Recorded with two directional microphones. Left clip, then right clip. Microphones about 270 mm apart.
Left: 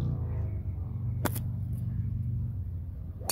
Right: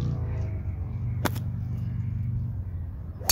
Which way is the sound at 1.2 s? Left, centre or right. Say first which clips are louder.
Right 4 dB; centre.